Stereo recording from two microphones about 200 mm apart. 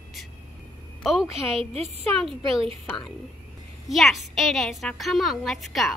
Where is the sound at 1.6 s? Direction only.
30° right (ahead or behind).